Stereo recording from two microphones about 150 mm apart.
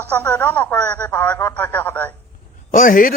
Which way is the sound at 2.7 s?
65° left (ahead or behind).